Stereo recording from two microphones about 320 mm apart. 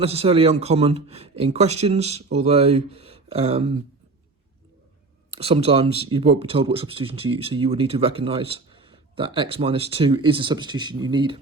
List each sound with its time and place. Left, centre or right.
0.0 s speech: centre
5.4 s speech: centre